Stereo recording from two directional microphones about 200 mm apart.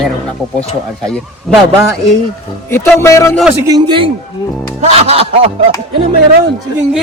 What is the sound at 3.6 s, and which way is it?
A man's voice, 20° right (ahead or behind).